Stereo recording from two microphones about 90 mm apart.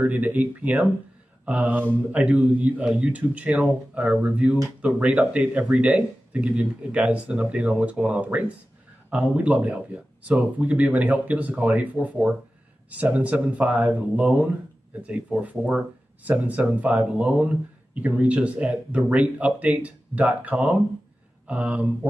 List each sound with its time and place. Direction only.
0.0 s speech: 20° right (ahead or behind)